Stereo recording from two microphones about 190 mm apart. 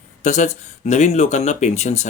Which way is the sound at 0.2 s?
40° left (ahead or behind).